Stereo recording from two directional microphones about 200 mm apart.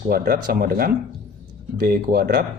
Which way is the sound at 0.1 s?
45° right (ahead or behind).